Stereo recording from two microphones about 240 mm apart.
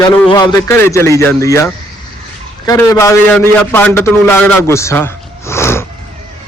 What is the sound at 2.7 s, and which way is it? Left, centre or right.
A man's voice, centre.